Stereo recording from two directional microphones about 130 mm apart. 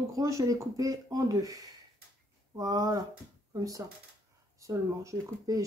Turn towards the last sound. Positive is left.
turn(degrees=-25)  # may be behind; listen again after turning